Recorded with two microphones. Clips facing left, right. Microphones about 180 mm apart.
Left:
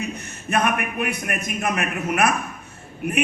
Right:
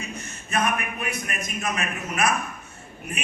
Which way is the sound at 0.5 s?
60° left (ahead or behind).